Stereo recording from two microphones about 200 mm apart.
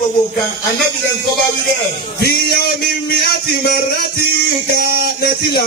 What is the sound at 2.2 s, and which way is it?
Speech, 50° left (ahead or behind).